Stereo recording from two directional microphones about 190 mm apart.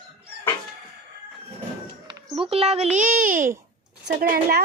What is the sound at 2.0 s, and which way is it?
A child's voice, 30° right (ahead or behind).